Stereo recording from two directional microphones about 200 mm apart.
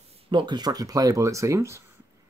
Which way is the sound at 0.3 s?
20° right (ahead or behind).